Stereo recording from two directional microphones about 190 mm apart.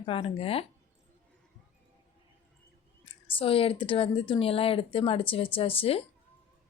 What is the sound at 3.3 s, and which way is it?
Speech, 30° left (ahead or behind).